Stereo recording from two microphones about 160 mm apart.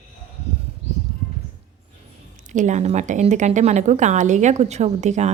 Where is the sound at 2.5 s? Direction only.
50° right (ahead or behind).